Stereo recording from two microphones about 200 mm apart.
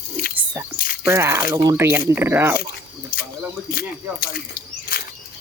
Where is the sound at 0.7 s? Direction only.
50° left (ahead or behind).